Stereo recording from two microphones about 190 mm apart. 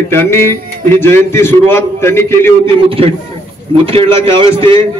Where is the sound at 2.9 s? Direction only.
30° right (ahead or behind).